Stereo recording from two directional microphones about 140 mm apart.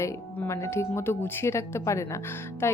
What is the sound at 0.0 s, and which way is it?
Speech, 20° left (ahead or behind).